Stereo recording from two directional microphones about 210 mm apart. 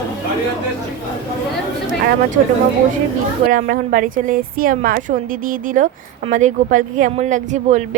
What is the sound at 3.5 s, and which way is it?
Speech, 40° right (ahead or behind).